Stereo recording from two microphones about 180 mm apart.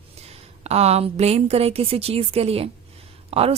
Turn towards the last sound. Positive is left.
turn(degrees=-35)  # may be behind; listen again after turning